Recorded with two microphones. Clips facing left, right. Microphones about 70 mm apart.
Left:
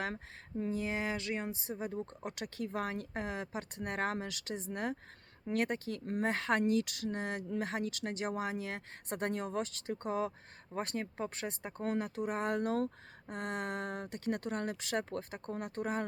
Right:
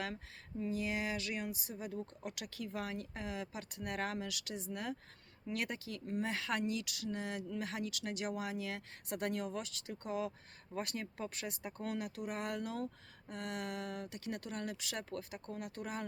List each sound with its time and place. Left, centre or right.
0.5 s speech: left